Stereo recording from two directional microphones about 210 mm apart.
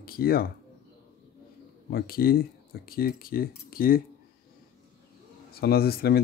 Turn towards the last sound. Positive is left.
turn(degrees=45)  # may be behind; listen again after turning